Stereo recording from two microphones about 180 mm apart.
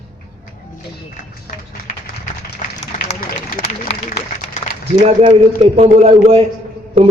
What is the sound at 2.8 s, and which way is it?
Run, 40° left (ahead or behind).